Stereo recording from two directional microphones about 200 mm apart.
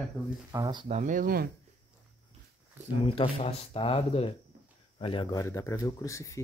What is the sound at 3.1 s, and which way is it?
Speech, 25° left (ahead or behind).